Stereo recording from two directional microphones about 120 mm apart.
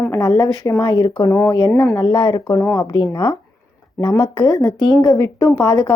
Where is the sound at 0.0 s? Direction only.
30° left (ahead or behind).